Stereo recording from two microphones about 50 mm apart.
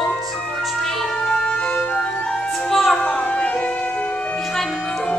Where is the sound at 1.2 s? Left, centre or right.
Centre.